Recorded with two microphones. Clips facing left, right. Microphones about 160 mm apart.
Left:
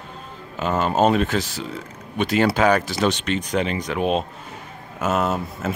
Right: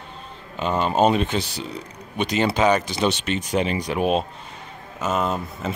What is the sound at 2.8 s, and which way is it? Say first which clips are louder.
Speech: left 1 dB; centre (ahead or behind).